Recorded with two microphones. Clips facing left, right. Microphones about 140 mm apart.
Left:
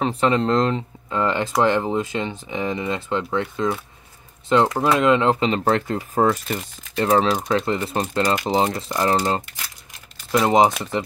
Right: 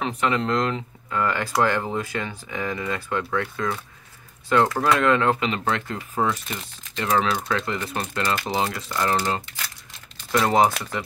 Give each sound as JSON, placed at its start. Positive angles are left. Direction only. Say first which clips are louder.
{"t": 0.0, "sound": "speech", "louder": "left 4 dB", "side_deg": 30}
{"t": 8.4, "sound": "speech", "louder": "left 5 dB", "side_deg": 20}
{"t": 10.4, "sound": "speech", "louder": "left 3 dB", "side_deg": 20}